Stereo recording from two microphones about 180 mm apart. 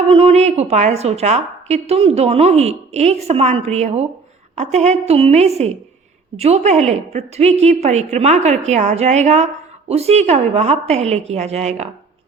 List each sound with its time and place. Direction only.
0.1 s a woman's voice: 35° right (ahead or behind)